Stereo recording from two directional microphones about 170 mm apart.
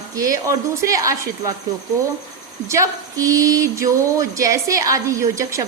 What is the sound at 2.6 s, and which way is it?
Speech, 20° right (ahead or behind).